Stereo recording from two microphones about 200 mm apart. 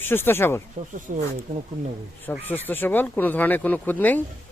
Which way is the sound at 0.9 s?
40° right (ahead or behind).